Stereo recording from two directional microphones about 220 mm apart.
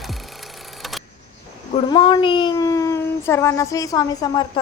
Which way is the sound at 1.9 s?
20° left (ahead or behind).